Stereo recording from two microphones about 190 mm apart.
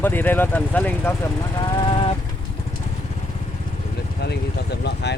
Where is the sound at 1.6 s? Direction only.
25° left (ahead or behind).